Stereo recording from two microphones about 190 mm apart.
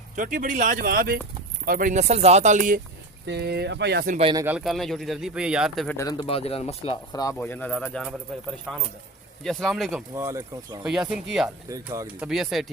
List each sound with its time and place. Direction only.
0.2 s speech: 45° right (ahead or behind)
3.2 s speech: 60° right (ahead or behind)
4.2 s speech: 25° right (ahead or behind)
4.4 s speech: 5° right (ahead or behind)
6.0 s speech: 20° left (ahead or behind)
7.3 s speech: 10° left (ahead or behind)
10.2 s speech: 15° right (ahead or behind)
10.8 s speech: 5° right (ahead or behind)
11.4 s speech: 15° right (ahead or behind)
12.2 s speech: centre (ahead or behind)